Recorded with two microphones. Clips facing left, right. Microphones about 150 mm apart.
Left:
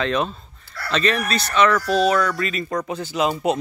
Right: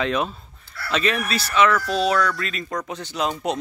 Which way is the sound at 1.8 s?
45° left (ahead or behind).